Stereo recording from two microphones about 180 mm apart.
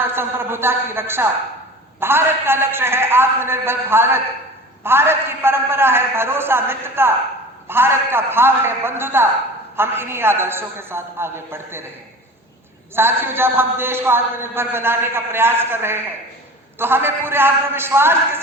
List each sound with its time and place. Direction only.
0.0 s a man's voice: 10° right (ahead or behind)
13.0 s a man's voice: 10° right (ahead or behind)